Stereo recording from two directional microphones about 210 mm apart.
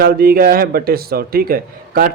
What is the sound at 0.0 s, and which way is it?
A man's voice, 45° right (ahead or behind).